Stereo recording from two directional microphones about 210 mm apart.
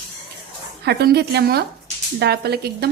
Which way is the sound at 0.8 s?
50° right (ahead or behind).